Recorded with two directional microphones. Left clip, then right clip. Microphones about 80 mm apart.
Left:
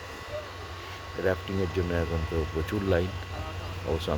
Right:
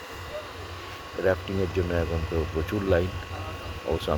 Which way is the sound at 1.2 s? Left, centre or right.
Left.